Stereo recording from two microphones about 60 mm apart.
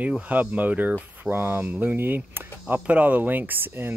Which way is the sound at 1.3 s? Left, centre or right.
Right.